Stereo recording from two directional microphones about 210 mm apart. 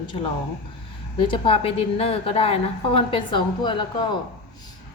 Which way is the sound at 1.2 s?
25° left (ahead or behind).